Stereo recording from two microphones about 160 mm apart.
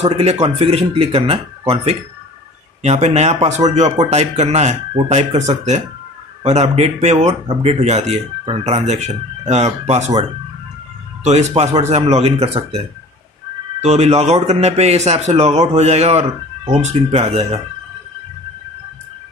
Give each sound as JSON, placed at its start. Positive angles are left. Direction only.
{"t": 0.0, "sound": "speech", "side_deg": -40}
{"t": 2.8, "sound": "speech", "side_deg": -45}
{"t": 11.2, "sound": "speech", "side_deg": -45}
{"t": 13.7, "sound": "speech", "side_deg": -40}